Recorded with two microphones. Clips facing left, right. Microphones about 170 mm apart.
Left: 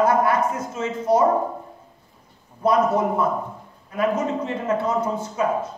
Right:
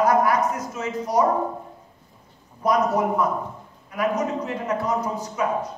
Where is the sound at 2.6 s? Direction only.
25° left (ahead or behind).